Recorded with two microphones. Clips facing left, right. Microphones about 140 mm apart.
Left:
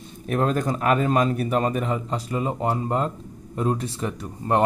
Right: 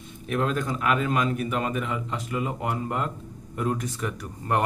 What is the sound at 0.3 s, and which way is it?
A man's voice, 40° left (ahead or behind).